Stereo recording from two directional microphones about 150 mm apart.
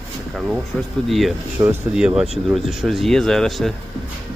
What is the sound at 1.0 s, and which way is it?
Speech, centre (ahead or behind).